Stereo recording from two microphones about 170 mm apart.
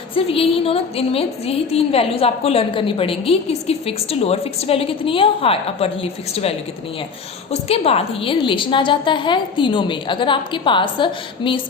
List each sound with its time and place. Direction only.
0.3 s a woman's voice: 35° left (ahead or behind)
7.5 s a woman's voice: 35° left (ahead or behind)